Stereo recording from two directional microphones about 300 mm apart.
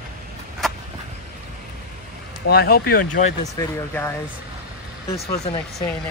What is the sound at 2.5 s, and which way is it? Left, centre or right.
Speech, left.